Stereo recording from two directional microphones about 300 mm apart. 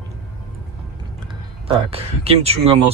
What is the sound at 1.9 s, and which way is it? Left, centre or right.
Speech, centre.